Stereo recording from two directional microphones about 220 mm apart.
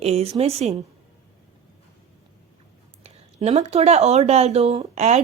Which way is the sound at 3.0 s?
30° right (ahead or behind).